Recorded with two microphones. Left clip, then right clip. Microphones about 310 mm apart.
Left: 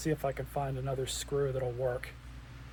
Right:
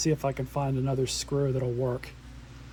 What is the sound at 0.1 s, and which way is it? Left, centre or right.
Speech, right.